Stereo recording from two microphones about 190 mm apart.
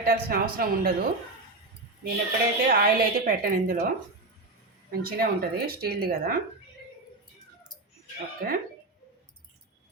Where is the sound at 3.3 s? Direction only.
50° right (ahead or behind).